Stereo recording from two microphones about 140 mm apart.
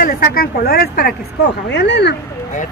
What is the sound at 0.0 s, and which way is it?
Speech, 90° left.